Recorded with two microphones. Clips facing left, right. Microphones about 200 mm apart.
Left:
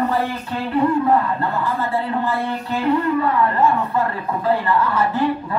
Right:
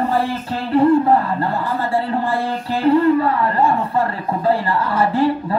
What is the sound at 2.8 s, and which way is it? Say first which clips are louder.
A woman's voice: right 5 dB; 30° right (ahead or behind).